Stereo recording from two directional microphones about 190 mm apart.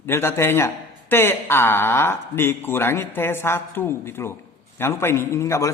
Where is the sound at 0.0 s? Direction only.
10° left (ahead or behind).